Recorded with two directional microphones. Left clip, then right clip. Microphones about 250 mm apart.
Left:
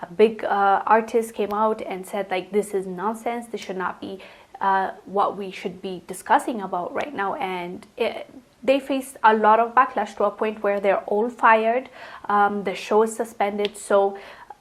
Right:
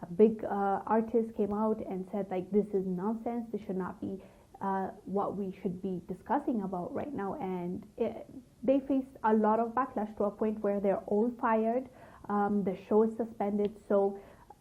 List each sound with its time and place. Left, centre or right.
0.0 s a woman's voice: centre
6.7 s a woman's voice: left
7.0 s a woman's voice: centre